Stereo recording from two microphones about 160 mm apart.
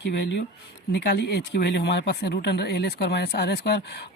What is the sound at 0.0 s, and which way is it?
Speech, 90° left.